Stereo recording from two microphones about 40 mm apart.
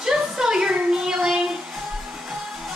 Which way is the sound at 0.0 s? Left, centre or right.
Centre.